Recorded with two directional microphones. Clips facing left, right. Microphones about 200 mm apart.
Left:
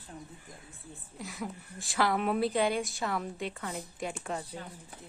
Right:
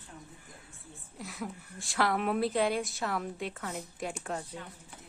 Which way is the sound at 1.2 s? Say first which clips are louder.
Left 1 dB; centre (ahead or behind).